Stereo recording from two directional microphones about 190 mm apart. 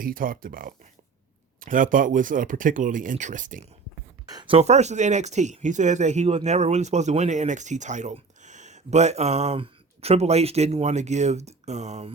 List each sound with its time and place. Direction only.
0.0 s speech: 50° right (ahead or behind)
4.3 s speech: 25° right (ahead or behind)